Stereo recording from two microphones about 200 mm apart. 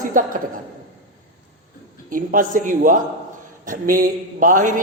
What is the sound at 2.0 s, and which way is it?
A woman's voice, 40° right (ahead or behind).